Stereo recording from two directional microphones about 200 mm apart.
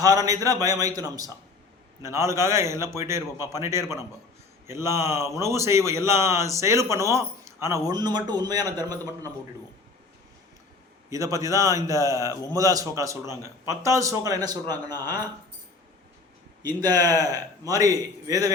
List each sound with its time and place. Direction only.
0.0 s a man's voice: 15° right (ahead or behind)
11.1 s a man's voice: 15° right (ahead or behind)
16.6 s a man's voice: 20° right (ahead or behind)